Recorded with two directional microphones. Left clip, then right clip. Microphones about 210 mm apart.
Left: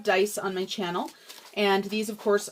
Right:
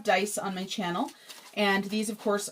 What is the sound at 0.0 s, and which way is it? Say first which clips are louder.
Speech: left 2 dB; 40° left (ahead or behind).